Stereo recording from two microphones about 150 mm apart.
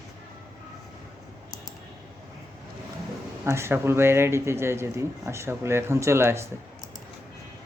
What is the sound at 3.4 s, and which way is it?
Speech, 15° right (ahead or behind).